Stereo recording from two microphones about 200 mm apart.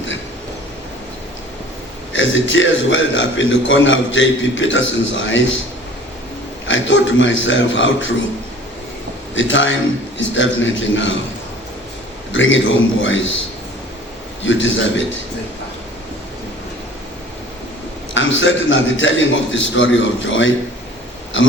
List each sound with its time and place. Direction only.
2.1 s a man's voice: 70° left (ahead or behind)
6.7 s a man's voice: 70° left (ahead or behind)
9.3 s a man's voice: 70° left (ahead or behind)
12.3 s a man's voice: 70° left (ahead or behind)
14.4 s a man's voice: 70° left (ahead or behind)
18.1 s a man's voice: 70° left (ahead or behind)